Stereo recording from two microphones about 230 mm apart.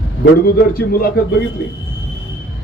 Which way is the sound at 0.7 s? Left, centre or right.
Left.